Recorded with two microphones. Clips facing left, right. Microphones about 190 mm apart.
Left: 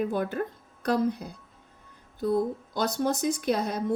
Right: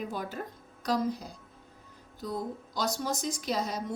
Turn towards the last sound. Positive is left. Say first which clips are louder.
# left 6 dB
turn(degrees=60)  # may be behind; listen again after turning